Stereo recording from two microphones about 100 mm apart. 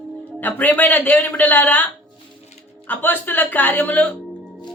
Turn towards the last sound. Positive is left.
turn(degrees=15)  # may be behind; listen again after turning